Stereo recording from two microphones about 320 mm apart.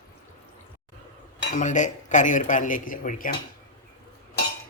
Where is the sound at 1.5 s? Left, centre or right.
Left.